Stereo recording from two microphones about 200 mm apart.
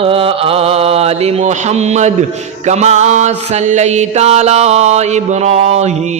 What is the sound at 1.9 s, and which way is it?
Mantra, 35° right (ahead or behind).